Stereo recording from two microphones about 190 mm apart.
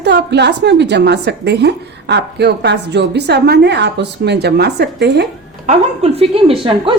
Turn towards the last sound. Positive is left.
turn(degrees=-30)  # may be behind; listen again after turning